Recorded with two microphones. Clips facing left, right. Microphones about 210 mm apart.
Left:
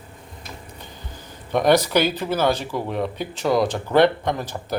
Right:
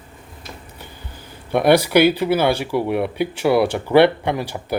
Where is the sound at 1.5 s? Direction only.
10° right (ahead or behind).